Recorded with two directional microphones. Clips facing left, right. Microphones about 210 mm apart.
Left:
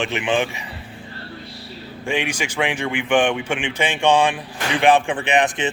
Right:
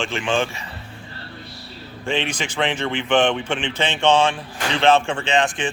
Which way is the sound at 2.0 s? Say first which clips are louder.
Left 1 dB; 10° left (ahead or behind).